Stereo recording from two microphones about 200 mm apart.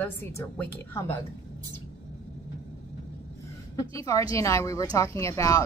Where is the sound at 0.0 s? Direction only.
10° left (ahead or behind).